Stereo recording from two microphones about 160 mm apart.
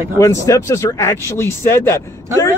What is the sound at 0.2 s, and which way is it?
Speech, 20° left (ahead or behind).